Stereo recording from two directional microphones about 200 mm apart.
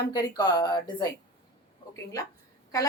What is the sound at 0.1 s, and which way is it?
Speech, 20° left (ahead or behind).